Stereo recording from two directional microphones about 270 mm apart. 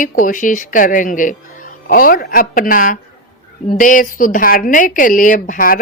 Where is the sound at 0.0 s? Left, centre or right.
Left.